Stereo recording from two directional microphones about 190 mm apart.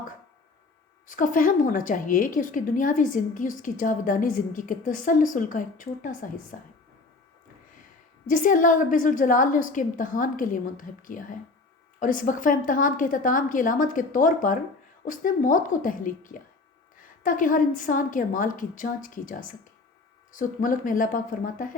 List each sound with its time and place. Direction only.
1.0 s a woman's voice: 45° left (ahead or behind)
8.3 s a woman's voice: 45° left (ahead or behind)